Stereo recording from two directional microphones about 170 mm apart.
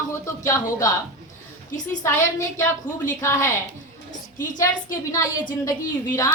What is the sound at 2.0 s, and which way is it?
A woman's voice, 15° left (ahead or behind).